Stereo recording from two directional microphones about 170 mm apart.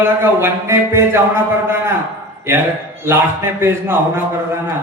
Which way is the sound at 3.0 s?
15° right (ahead or behind).